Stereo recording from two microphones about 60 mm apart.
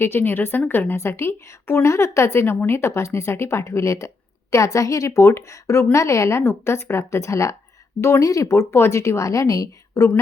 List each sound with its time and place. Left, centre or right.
0.0 s a woman's voice: left
6.4 s a woman's voice: left
8.7 s a woman's voice: left